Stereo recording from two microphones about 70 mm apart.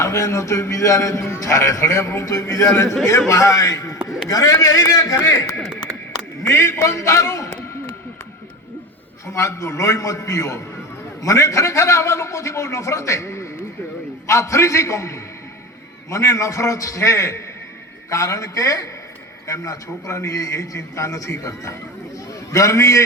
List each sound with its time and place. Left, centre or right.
0.0 s a man's voice: left
6.4 s a sound: left
6.8 s a man's voice: left
9.2 s a man's voice: left